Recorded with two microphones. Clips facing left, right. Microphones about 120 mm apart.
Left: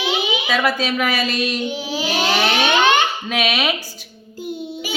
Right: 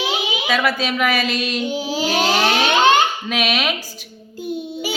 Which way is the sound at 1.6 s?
40° right (ahead or behind).